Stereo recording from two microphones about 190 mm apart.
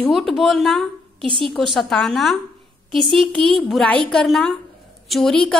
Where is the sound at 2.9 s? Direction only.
25° right (ahead or behind).